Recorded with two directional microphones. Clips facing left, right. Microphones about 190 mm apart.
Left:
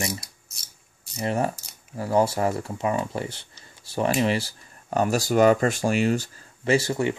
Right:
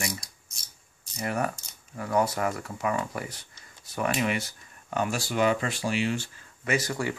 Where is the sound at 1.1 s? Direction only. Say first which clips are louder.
Left 4 dB; 25° left (ahead or behind).